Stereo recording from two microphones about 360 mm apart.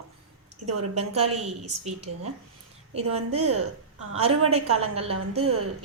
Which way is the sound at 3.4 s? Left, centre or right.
Right.